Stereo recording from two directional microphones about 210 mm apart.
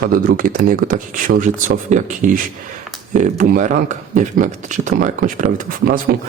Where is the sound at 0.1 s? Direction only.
40° right (ahead or behind).